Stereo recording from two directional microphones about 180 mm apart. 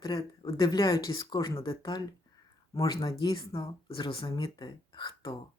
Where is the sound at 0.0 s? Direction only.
25° left (ahead or behind).